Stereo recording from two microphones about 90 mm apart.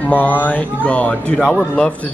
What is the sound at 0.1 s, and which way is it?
Speech, 20° left (ahead or behind).